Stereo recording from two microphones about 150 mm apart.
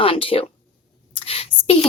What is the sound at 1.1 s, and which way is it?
Whispering, 40° left (ahead or behind).